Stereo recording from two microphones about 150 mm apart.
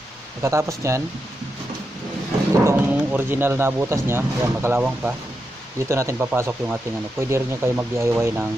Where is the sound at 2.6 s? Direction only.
15° right (ahead or behind).